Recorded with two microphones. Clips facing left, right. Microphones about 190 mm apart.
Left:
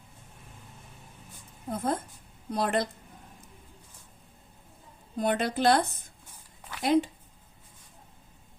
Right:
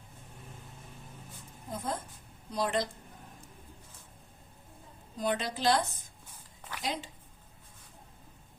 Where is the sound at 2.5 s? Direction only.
60° left (ahead or behind).